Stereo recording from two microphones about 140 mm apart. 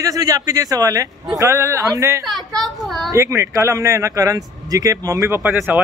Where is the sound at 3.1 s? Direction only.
20° right (ahead or behind).